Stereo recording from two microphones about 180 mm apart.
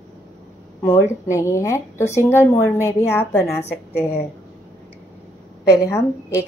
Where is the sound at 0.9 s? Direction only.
15° left (ahead or behind).